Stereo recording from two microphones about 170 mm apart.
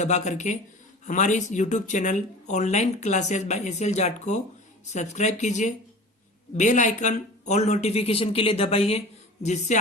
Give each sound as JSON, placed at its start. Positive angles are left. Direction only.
{"t": 0.0, "sound": "speech", "side_deg": 45}